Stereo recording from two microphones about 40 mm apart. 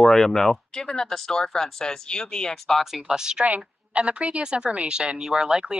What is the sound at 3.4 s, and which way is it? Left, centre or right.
A woman's voice, right.